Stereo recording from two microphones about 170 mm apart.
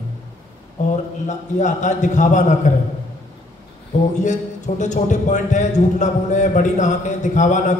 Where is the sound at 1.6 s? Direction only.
45° left (ahead or behind).